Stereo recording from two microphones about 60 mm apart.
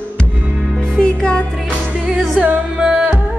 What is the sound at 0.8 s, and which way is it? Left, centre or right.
Music, centre.